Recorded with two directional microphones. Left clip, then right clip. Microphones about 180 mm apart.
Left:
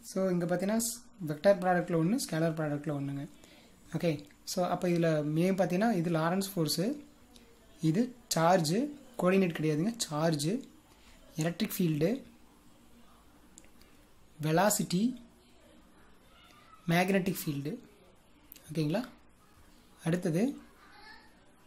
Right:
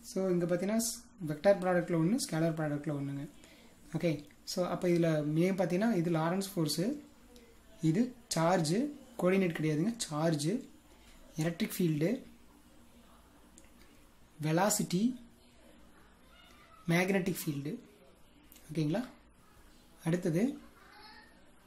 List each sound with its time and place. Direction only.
0.1 s speech: 20° left (ahead or behind)
14.4 s speech: 20° left (ahead or behind)
16.8 s speech: 20° left (ahead or behind)